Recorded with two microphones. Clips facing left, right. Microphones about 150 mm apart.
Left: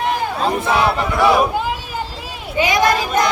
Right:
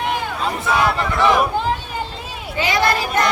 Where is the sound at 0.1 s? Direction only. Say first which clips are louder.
Left 4 dB; 35° left (ahead or behind).